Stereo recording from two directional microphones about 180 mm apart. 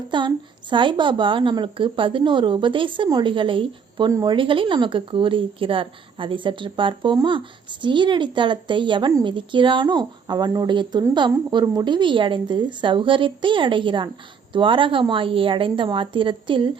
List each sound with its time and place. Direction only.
0.1 s a woman's voice: 25° right (ahead or behind)